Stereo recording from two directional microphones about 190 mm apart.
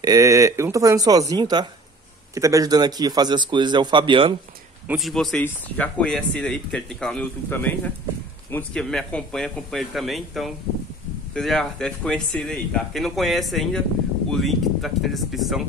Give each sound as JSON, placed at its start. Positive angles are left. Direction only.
{"t": 0.0, "sound": "speech", "side_deg": -15}
{"t": 4.8, "sound": "speech", "side_deg": 0}